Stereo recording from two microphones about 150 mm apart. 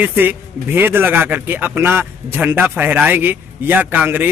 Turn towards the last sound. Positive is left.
turn(degrees=-10)  # may be behind; listen again after turning